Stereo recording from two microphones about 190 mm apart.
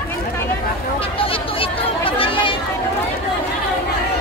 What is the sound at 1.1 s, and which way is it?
Chatter, 30° left (ahead or behind).